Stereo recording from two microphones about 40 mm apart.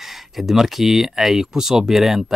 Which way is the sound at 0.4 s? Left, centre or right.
Centre.